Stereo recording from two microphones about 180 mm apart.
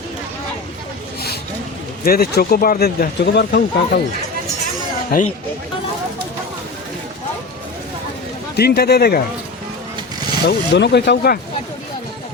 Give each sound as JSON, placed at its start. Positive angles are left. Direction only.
{"t": 2.0, "sound": "speech", "side_deg": 60}
{"t": 8.5, "sound": "speech", "side_deg": 60}
{"t": 10.4, "sound": "speech", "side_deg": 70}